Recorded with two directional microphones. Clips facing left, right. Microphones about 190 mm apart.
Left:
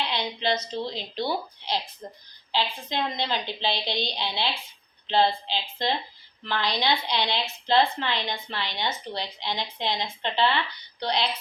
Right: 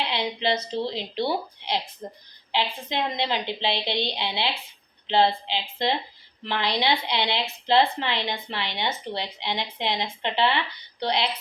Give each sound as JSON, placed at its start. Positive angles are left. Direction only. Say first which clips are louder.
{"t": 0.0, "sound": "a woman's voice", "louder": "right 2 dB", "side_deg": -25}